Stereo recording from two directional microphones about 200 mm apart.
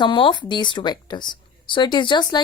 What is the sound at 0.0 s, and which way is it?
Speech, 25° left (ahead or behind).